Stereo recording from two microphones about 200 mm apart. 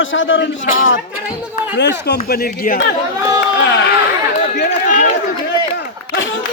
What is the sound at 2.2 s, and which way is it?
Speech, 50° left (ahead or behind).